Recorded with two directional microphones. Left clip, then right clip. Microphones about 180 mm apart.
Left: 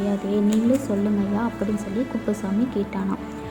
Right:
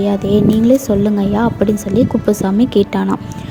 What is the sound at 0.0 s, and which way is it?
A woman's voice, 40° right (ahead or behind).